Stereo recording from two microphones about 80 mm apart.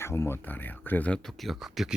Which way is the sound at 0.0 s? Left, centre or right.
Left.